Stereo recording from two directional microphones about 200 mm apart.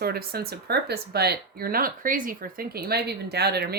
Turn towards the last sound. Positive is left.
turn(degrees=-55)  # may be behind; listen again after turning